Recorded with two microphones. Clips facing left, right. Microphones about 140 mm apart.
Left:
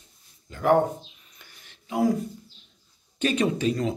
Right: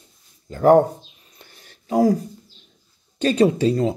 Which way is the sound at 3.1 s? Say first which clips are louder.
Right 7 dB; 35° right (ahead or behind).